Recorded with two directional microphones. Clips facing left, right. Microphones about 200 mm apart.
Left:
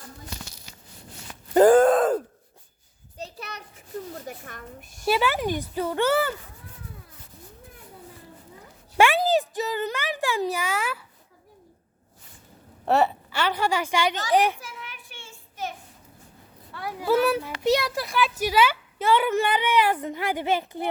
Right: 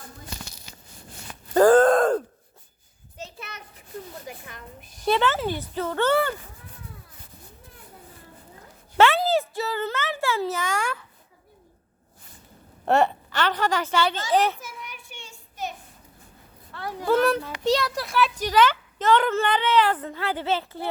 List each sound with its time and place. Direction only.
1.5 s groan: 15° left (ahead or behind)
3.2 s a sound: 35° left (ahead or behind)
4.3 s a child's voice: 45° left (ahead or behind)
5.0 s a woman's voice: 10° left (ahead or behind)
9.0 s a sound: 15° left (ahead or behind)
12.8 s a woman's voice: centre (ahead or behind)
16.7 s a woman's voice: 10° left (ahead or behind)